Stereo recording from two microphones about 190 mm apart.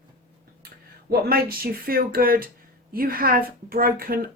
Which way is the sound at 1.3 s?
50° right (ahead or behind).